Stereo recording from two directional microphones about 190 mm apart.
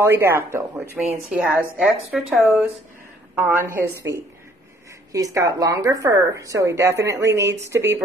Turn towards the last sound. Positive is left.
turn(degrees=-15)  # may be behind; listen again after turning